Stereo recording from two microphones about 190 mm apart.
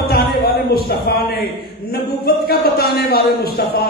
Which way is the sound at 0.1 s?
50° left (ahead or behind).